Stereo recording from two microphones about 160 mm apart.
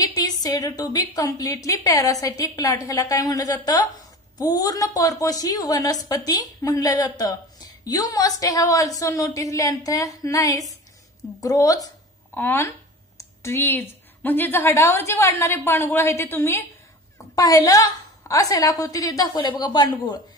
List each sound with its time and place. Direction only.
0.0 s a woman's voice: 25° left (ahead or behind)